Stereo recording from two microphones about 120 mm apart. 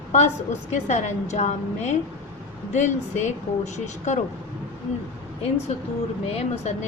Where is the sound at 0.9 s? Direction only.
70° left (ahead or behind).